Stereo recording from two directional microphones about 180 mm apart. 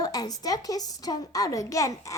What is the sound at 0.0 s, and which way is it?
A woman's voice, 20° left (ahead or behind).